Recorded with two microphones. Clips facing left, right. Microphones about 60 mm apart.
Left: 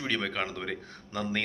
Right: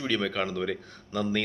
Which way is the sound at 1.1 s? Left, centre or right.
Left.